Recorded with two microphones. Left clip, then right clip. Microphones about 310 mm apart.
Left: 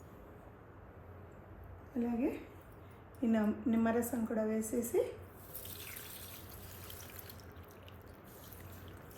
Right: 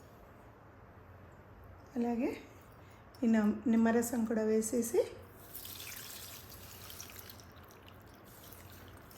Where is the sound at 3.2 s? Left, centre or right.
Right.